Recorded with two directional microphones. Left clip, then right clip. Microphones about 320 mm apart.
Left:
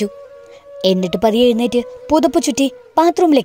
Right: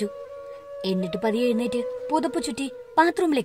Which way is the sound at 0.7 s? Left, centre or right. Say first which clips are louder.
Left 12 dB; left.